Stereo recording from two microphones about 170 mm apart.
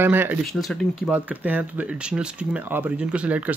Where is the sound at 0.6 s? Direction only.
Centre (ahead or behind).